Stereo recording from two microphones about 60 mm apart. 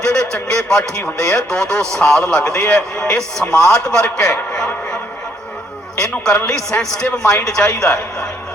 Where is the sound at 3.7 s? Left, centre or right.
Centre.